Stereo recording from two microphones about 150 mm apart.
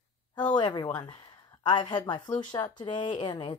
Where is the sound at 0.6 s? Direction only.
30° left (ahead or behind).